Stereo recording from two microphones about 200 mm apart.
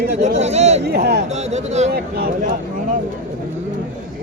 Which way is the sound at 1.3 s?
35° right (ahead or behind).